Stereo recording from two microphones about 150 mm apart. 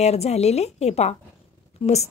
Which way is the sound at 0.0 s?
45° left (ahead or behind).